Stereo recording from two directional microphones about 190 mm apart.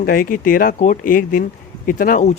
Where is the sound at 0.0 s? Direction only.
45° left (ahead or behind).